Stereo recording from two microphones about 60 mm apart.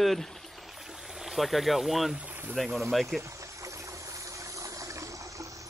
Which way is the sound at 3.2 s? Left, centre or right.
Right.